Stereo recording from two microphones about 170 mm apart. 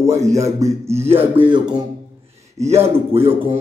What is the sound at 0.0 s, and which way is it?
Speech, 15° right (ahead or behind).